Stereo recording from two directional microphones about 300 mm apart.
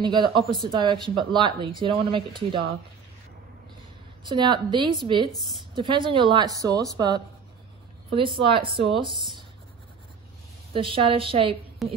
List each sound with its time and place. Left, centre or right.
0.0 s speech: centre
4.2 s speech: centre
5.3 s a woman's voice: centre
5.8 s speech: centre
10.7 s speech: centre
11.8 s a woman's voice: centre